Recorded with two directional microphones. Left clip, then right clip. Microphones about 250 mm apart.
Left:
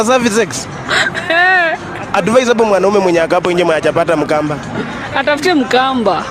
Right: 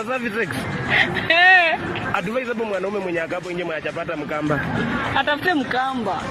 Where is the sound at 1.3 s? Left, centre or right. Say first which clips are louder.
Left 3 dB; left.